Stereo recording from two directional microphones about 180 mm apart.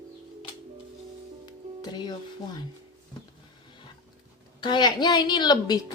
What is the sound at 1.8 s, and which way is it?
Music, 25° left (ahead or behind).